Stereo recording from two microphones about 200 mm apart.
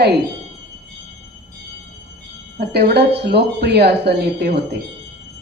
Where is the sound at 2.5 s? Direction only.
55° right (ahead or behind).